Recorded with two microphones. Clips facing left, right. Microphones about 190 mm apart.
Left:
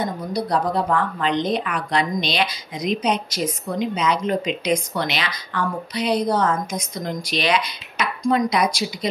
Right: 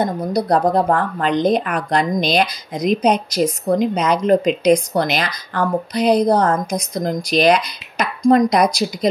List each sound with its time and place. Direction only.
0.0 s a woman's voice: 50° right (ahead or behind)